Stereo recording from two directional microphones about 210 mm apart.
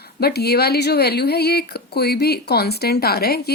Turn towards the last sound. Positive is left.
turn(degrees=50)  # may be behind; listen again after turning